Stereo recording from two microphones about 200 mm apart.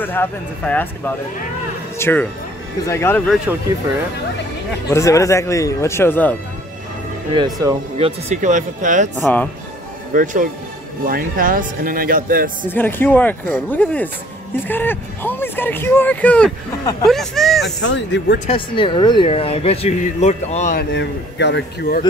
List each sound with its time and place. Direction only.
0.0 s speech: 10° left (ahead or behind)
3.5 s speech: 10° right (ahead or behind)
4.9 s speech: 15° left (ahead or behind)
7.3 s speech: 20° right (ahead or behind)
8.3 s speech: 40° right (ahead or behind)
9.2 s speech: 5° left (ahead or behind)
10.1 s speech: 40° right (ahead or behind)
12.6 s speech: 10° left (ahead or behind)
17.7 s a man's voice: 65° left (ahead or behind)
18.5 s speech: 25° left (ahead or behind)
20.9 s a man's voice: 60° left (ahead or behind)